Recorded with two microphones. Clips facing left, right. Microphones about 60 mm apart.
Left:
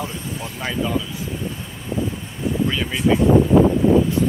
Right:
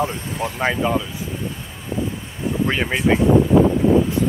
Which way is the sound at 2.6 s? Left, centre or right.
Right.